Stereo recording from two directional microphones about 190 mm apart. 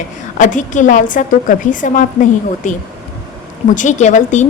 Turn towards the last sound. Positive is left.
turn(degrees=40)  # may be behind; listen again after turning